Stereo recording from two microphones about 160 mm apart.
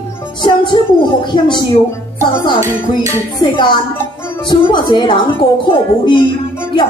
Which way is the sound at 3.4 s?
30° left (ahead or behind).